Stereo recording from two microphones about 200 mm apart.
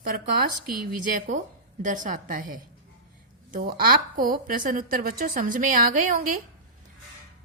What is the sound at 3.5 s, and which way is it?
Speech, 45° right (ahead or behind).